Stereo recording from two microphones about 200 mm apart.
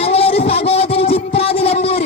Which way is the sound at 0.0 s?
30° left (ahead or behind).